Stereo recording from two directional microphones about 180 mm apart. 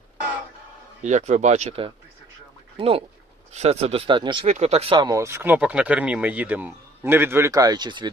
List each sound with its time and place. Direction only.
1.0 s speech: 40° right (ahead or behind)
4.5 s speech: 35° right (ahead or behind)